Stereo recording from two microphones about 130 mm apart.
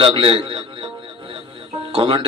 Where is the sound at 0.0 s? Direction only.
40° right (ahead or behind).